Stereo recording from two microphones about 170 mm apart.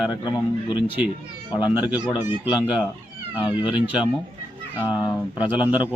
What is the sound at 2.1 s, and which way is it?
Speech, 10° right (ahead or behind).